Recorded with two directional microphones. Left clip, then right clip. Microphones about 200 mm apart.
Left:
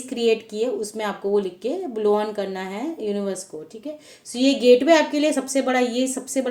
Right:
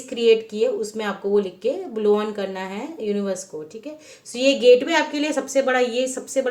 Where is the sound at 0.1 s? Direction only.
50° left (ahead or behind).